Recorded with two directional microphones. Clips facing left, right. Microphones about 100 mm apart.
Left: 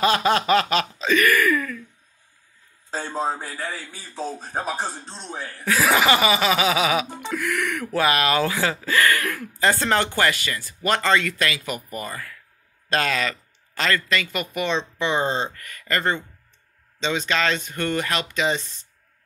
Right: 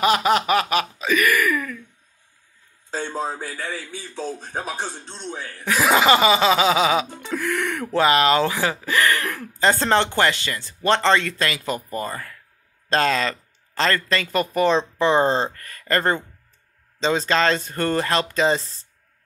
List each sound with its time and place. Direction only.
0.0 s a sound: 15° right (ahead or behind)
2.9 s a man's voice: centre (ahead or behind)
5.7 s speech: 20° right (ahead or behind)